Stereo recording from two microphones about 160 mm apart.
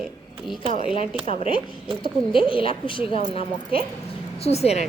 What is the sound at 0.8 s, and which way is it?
Speech, 35° left (ahead or behind).